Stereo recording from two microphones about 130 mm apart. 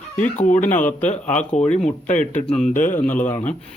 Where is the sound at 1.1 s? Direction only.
70° left (ahead or behind).